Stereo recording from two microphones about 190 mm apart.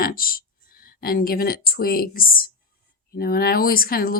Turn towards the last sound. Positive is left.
turn(degrees=50)  # may be behind; listen again after turning